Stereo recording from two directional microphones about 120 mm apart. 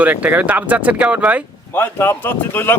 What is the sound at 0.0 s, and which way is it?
Speech, 15° right (ahead or behind).